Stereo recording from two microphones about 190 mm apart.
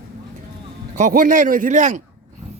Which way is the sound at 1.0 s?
45° right (ahead or behind).